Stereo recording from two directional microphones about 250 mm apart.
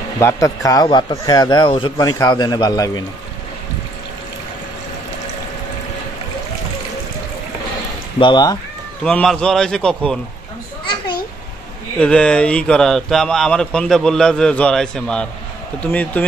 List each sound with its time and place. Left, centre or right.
0.2 s a man's voice: centre
8.2 s a man's voice: centre
9.0 s speech: centre
12.0 s speech: centre